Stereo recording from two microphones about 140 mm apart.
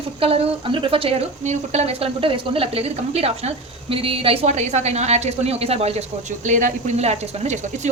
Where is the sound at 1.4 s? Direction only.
55° right (ahead or behind).